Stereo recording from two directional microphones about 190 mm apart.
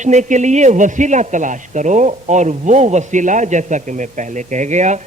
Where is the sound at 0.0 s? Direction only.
40° right (ahead or behind).